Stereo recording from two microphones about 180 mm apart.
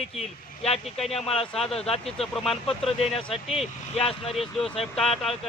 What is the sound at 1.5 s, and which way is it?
Speech, 5° left (ahead or behind).